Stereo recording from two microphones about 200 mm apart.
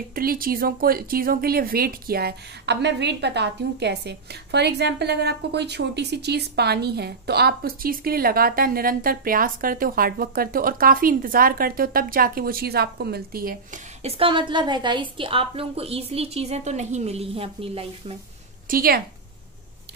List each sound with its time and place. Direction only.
0.1 s speech: 45° right (ahead or behind)
14.0 s a woman's voice: 25° right (ahead or behind)
18.7 s speech: 45° right (ahead or behind)